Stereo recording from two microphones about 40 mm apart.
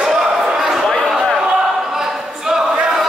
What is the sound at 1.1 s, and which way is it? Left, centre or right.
Slam, centre.